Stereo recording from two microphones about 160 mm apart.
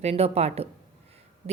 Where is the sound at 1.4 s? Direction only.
50° right (ahead or behind).